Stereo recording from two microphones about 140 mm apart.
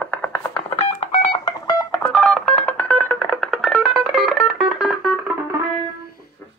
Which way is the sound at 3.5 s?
Centre (ahead or behind).